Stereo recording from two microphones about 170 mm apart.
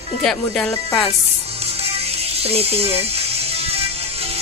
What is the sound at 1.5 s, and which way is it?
Music, 35° right (ahead or behind).